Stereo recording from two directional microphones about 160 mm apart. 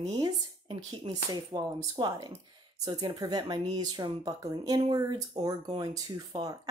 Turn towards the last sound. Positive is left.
turn(degrees=-25)  # may be behind; listen again after turning